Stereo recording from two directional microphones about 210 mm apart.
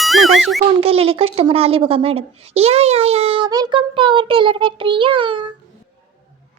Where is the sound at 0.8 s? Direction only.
25° right (ahead or behind).